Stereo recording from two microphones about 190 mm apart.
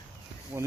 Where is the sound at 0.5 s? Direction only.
15° right (ahead or behind).